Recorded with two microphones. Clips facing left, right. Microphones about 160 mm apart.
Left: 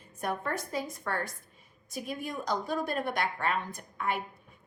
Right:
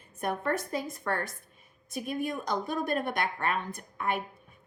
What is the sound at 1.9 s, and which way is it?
A woman's voice, 55° right (ahead or behind).